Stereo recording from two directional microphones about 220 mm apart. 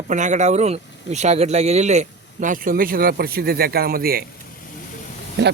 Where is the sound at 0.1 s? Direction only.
35° right (ahead or behind).